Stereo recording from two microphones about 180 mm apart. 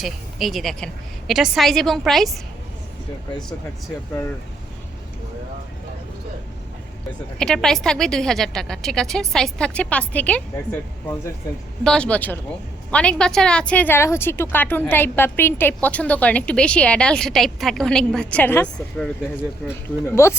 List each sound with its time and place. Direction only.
0.0 s a woman's voice: centre (ahead or behind)
7.3 s a woman's voice: 5° left (ahead or behind)